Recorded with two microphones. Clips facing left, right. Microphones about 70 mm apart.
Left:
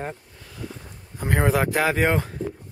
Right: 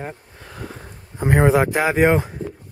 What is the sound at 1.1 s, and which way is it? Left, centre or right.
Speech, right.